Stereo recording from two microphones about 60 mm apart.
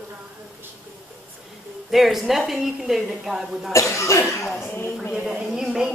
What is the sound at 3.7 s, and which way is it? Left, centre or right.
Speech, left.